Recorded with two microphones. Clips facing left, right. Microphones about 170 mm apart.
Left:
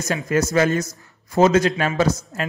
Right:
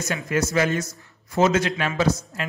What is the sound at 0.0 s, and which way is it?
Speech, 40° left (ahead or behind).